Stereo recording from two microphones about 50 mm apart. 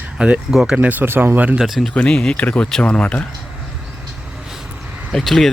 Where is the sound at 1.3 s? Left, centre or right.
Right.